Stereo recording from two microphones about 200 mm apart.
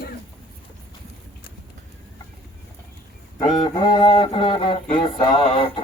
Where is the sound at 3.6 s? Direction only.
20° left (ahead or behind).